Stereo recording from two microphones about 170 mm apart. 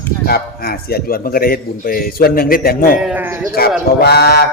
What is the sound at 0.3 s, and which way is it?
A man's voice, 65° left (ahead or behind).